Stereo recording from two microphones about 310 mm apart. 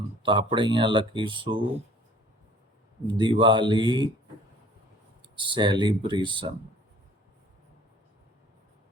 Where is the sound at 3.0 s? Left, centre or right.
Centre.